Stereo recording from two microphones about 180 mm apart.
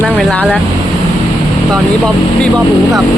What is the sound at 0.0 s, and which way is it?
Speech, 5° left (ahead or behind).